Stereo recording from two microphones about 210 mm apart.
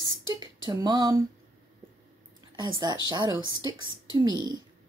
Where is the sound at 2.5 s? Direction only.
20° right (ahead or behind).